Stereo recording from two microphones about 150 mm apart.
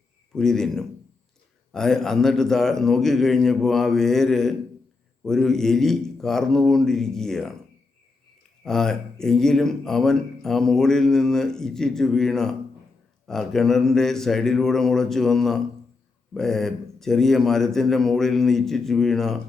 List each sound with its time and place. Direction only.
0.3 s a man's voice: 5° left (ahead or behind)
8.6 s a man's voice: 5° left (ahead or behind)